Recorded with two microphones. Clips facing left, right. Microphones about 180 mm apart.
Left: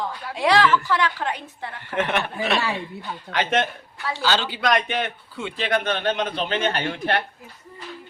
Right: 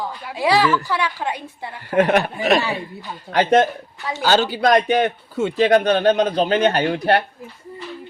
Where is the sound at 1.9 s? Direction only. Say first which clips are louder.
Right 8 dB; 40° right (ahead or behind).